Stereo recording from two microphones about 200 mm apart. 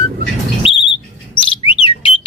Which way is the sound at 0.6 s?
30° left (ahead or behind).